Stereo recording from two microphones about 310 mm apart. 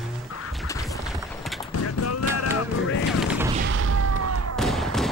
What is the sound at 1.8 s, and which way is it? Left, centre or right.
Run, left.